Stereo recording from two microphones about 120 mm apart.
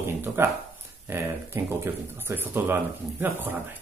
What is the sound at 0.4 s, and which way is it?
Speech, 20° right (ahead or behind).